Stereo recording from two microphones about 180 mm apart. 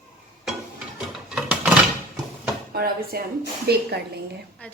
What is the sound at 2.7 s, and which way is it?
Speech, 60° right (ahead or behind).